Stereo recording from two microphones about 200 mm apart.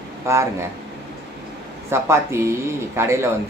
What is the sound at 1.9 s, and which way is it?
Speech, 15° right (ahead or behind).